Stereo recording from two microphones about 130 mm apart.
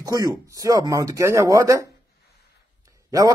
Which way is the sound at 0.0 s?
30° right (ahead or behind).